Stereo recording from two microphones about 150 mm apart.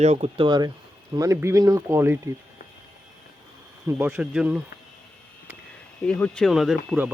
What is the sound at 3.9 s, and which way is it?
Speech, 15° right (ahead or behind).